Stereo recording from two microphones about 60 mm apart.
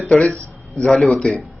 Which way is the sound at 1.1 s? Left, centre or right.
Centre.